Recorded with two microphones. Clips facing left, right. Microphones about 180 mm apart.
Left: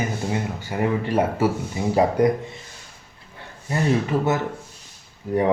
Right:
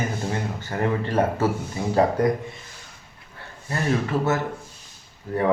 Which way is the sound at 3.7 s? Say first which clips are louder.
Left 2 dB; 15° left (ahead or behind).